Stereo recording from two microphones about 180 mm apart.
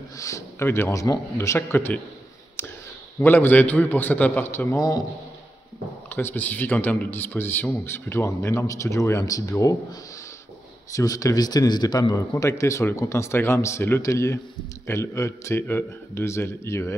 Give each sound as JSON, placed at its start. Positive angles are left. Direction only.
{"t": 0.2, "sound": "a man's voice", "side_deg": 15}
{"t": 3.2, "sound": "a man's voice", "side_deg": 10}
{"t": 6.0, "sound": "a man's voice", "side_deg": 10}
{"t": 10.9, "sound": "a man's voice", "side_deg": 20}